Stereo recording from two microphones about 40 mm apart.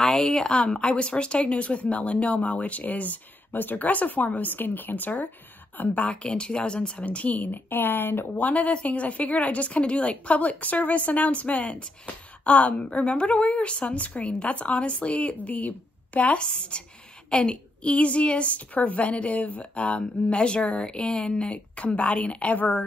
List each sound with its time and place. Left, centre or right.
0.0 s a woman's voice: centre; by 8.3 s left
8.4 s a woman's voice: left